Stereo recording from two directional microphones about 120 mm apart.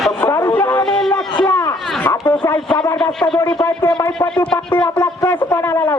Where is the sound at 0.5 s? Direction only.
15° left (ahead or behind).